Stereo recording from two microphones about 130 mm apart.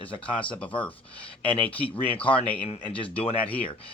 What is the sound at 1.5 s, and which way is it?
Speech, 10° left (ahead or behind).